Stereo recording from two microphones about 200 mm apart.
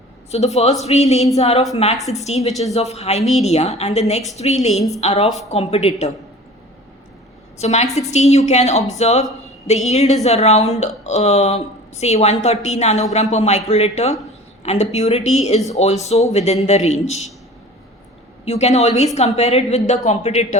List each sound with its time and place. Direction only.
0.3 s speech: 35° left (ahead or behind)
4.7 s a woman's voice: centre (ahead or behind)
4.9 s speech: 30° left (ahead or behind)
7.6 s speech: 35° left (ahead or behind)
18.4 s speech: 35° left (ahead or behind)